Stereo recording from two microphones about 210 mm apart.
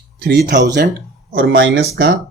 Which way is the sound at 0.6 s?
55° right (ahead or behind).